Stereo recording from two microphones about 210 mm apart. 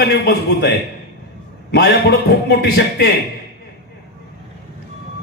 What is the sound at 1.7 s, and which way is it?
A man's voice, 50° left (ahead or behind).